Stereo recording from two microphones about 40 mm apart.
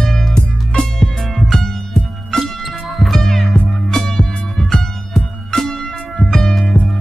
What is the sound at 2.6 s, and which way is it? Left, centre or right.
Music, centre.